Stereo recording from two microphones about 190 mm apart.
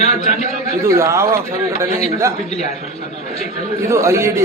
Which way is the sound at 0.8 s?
15° right (ahead or behind).